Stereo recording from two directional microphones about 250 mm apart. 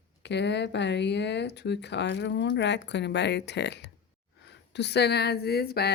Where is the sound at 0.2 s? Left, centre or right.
Left.